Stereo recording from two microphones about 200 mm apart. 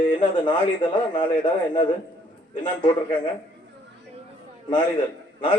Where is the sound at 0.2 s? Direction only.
25° left (ahead or behind).